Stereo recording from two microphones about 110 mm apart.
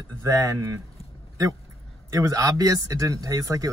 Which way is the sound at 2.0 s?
30° right (ahead or behind).